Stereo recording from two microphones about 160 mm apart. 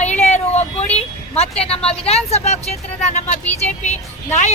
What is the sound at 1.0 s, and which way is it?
Vehicle, 40° left (ahead or behind).